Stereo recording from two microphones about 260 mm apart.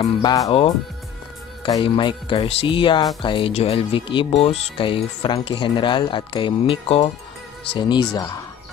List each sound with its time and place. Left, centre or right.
0.0 s speech: centre